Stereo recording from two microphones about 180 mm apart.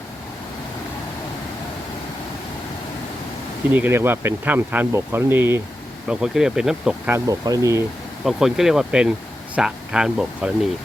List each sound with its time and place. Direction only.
3.7 s speech: 10° right (ahead or behind)
7.3 s speech: 20° right (ahead or behind)
8.2 s speech: centre (ahead or behind)